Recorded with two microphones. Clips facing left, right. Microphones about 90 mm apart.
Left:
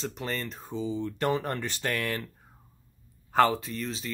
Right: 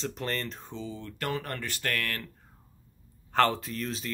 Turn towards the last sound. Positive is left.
turn(degrees=0)  # may be behind; listen again after turning